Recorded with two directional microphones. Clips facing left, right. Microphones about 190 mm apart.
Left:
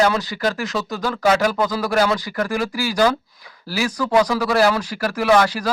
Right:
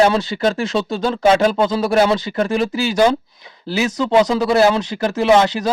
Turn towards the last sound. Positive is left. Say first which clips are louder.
# right 3 dB
turn(degrees=-20)  # may be behind; listen again after turning